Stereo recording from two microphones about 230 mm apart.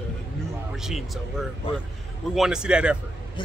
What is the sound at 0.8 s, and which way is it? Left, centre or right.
Speech, centre.